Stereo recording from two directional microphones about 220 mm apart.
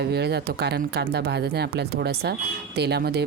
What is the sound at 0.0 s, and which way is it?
Speech, 50° right (ahead or behind).